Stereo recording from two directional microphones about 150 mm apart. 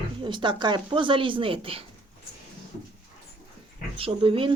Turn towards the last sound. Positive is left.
turn(degrees=-35)  # may be behind; listen again after turning